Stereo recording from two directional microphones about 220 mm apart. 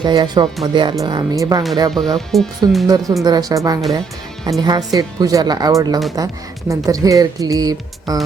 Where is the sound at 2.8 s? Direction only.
15° right (ahead or behind).